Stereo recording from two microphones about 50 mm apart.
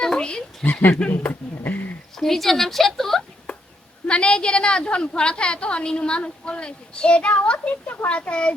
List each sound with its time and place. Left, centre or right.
0.0 s a sound: centre
0.6 s speech: left
2.1 s speech: centre
4.0 s a woman's voice: left